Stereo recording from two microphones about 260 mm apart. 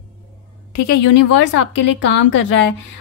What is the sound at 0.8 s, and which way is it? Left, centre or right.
A woman's voice, left.